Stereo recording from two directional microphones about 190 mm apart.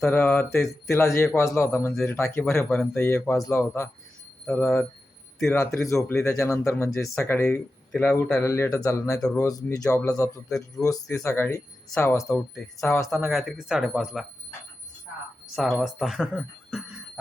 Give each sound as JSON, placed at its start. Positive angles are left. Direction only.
{"t": 0.0, "sound": "speech", "side_deg": 10}
{"t": 9.5, "sound": "speech", "side_deg": 20}
{"t": 13.2, "sound": "speech", "side_deg": 0}
{"t": 15.5, "sound": "speech", "side_deg": 0}